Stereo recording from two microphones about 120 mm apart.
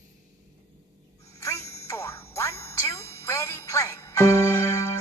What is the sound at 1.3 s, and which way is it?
Music, 25° left (ahead or behind).